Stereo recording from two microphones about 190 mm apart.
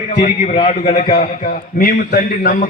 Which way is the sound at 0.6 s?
45° left (ahead or behind).